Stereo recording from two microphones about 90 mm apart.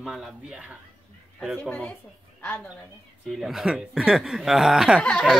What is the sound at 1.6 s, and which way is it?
A woman's voice, 15° left (ahead or behind).